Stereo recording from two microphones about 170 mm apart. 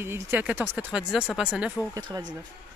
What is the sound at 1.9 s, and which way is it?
Speech, 25° right (ahead or behind).